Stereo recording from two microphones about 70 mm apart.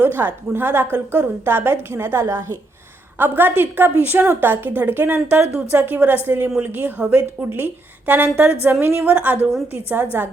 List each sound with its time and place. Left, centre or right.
0.0 s a woman's voice: right
3.2 s a woman's voice: right